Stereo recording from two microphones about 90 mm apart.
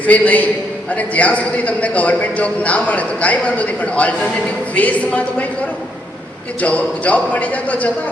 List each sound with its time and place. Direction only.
0.0 s a man's voice: 15° left (ahead or behind)
6.6 s a man's voice: 15° left (ahead or behind)